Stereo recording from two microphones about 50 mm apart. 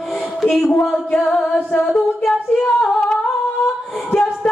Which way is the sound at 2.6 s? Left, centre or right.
Centre.